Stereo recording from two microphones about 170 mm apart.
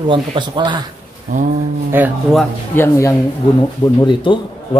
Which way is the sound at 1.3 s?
50° right (ahead or behind).